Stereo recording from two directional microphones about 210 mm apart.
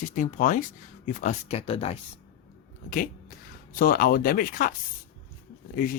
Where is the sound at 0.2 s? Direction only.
35° left (ahead or behind).